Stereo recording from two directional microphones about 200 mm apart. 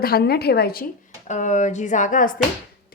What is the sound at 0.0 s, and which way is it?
A woman's voice, 50° left (ahead or behind).